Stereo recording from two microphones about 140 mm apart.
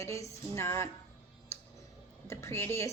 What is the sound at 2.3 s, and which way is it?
Speech, 20° left (ahead or behind).